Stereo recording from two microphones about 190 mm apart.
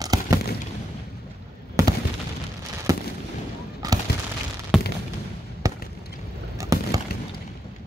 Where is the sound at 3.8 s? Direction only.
20° right (ahead or behind).